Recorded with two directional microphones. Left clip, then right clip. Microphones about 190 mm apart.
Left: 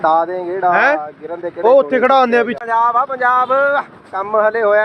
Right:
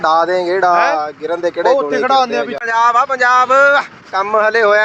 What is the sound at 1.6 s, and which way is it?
Speech, 55° left (ahead or behind).